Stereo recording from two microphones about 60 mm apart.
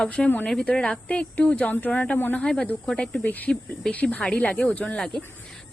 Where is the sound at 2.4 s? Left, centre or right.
Centre.